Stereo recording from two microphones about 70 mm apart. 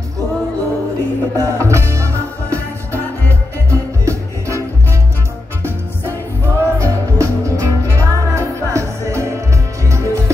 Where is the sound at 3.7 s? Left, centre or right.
Right.